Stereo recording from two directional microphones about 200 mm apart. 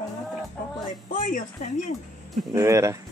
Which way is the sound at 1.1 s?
40° left (ahead or behind).